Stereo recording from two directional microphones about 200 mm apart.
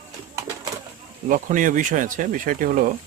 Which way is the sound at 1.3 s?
40° right (ahead or behind).